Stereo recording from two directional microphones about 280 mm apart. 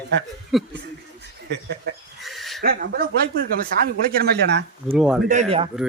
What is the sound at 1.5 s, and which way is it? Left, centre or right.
Speech, right.